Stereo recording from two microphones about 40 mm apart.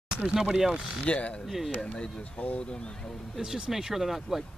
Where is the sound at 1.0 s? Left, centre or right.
Left.